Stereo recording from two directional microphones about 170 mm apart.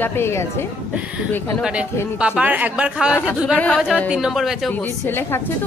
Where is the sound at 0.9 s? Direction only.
10° right (ahead or behind).